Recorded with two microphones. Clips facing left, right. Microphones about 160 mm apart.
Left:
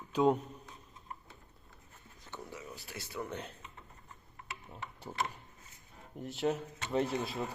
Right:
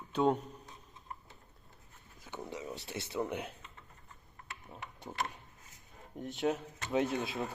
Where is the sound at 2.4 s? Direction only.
20° right (ahead or behind).